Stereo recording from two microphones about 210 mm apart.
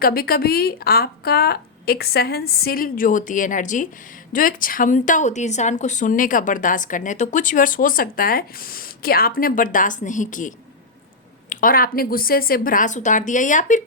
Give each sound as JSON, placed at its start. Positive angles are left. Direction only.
{"t": 0.0, "sound": "a woman's voice", "side_deg": 45}